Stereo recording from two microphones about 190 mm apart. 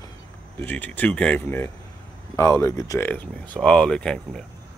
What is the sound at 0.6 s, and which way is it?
Speech, 10° left (ahead or behind).